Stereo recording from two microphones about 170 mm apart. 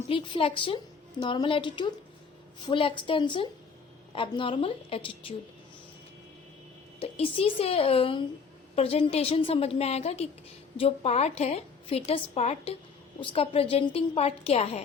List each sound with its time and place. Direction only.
0.1 s a woman's voice: 30° left (ahead or behind)
7.0 s a woman's voice: 35° left (ahead or behind)